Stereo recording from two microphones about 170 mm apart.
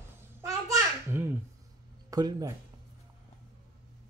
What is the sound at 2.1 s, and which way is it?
Speech, 20° right (ahead or behind).